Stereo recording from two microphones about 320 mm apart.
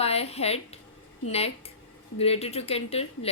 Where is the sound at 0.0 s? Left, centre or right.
Centre.